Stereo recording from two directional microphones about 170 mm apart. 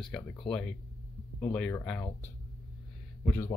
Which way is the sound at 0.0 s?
5° left (ahead or behind).